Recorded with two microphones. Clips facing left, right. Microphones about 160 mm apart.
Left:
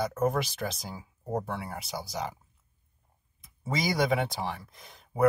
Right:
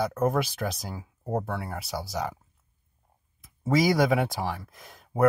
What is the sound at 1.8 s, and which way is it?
Speech, 60° right (ahead or behind).